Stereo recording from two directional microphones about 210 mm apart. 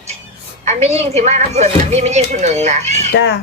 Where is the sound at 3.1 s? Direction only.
55° left (ahead or behind).